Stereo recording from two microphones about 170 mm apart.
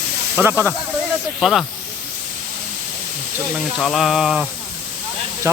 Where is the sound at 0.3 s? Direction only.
15° right (ahead or behind).